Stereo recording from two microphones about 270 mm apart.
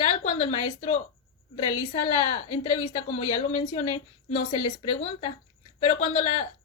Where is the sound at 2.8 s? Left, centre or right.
Left.